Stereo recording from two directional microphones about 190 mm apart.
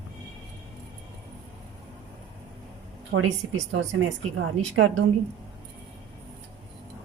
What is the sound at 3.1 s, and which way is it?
A woman's voice, 90° right.